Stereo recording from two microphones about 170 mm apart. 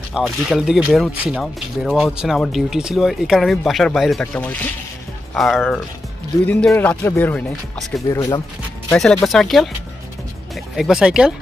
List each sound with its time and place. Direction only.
0.1 s speech: 5° right (ahead or behind); by 8.4 s 20° left (ahead or behind)
8.9 s speech: centre (ahead or behind)